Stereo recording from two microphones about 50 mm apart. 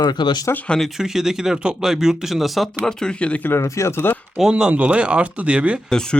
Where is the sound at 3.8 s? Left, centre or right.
Left.